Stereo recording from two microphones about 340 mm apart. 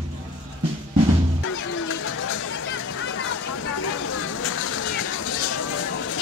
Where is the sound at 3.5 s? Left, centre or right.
Left.